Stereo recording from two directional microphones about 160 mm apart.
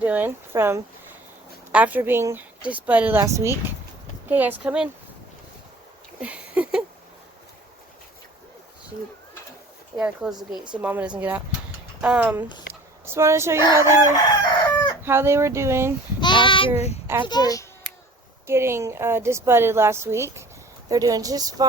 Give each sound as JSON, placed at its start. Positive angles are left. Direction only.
{"t": 0.0, "sound": "a woman's voice", "side_deg": -10}
{"t": 6.1, "sound": "a sound", "side_deg": -10}
{"t": 10.0, "sound": "a woman's voice", "side_deg": -5}
{"t": 14.4, "sound": "chicken", "side_deg": 25}
{"t": 15.0, "sound": "a woman's voice", "side_deg": -15}
{"t": 16.2, "sound": "child singing", "side_deg": 30}
{"t": 17.2, "sound": "a child's voice", "side_deg": 25}
{"t": 18.4, "sound": "a woman's voice", "side_deg": -15}